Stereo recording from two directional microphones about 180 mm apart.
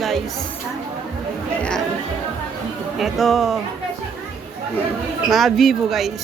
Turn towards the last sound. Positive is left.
turn(degrees=0)  # may be behind; listen again after turning